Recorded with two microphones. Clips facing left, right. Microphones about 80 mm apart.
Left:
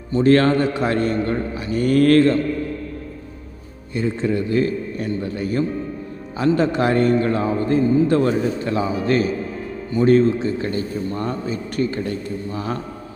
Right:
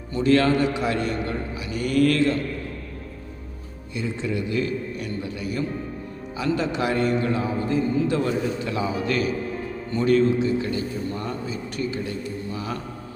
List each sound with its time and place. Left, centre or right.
0.2 s a man's voice: left
3.9 s a man's voice: left